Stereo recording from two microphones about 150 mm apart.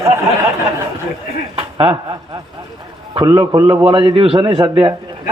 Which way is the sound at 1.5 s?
35° right (ahead or behind).